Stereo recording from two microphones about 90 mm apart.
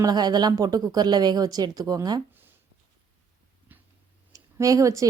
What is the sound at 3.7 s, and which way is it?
Tick-tock, 20° right (ahead or behind).